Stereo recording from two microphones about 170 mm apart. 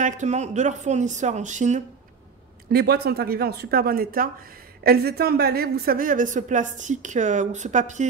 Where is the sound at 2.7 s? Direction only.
70° right (ahead or behind).